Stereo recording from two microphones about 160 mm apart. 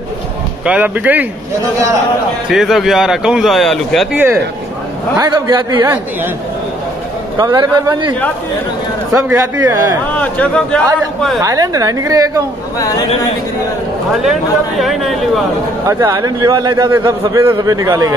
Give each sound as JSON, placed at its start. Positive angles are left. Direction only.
{"t": 0.7, "sound": "speech", "side_deg": -10}
{"t": 2.5, "sound": "a man's voice", "side_deg": 0}
{"t": 5.1, "sound": "speech", "side_deg": -25}
{"t": 5.8, "sound": "speech", "side_deg": -15}
{"t": 7.3, "sound": "speech", "side_deg": -25}
{"t": 9.1, "sound": "speech", "side_deg": -20}
{"t": 10.1, "sound": "speech", "side_deg": 10}
{"t": 11.4, "sound": "speech", "side_deg": -20}
{"t": 12.7, "sound": "speech", "side_deg": 20}
{"t": 14.2, "sound": "a man's voice", "side_deg": 0}
{"t": 15.9, "sound": "speech", "side_deg": -20}